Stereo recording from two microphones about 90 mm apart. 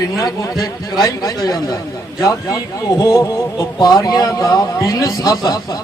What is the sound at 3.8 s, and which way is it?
A man's voice, 45° left (ahead or behind).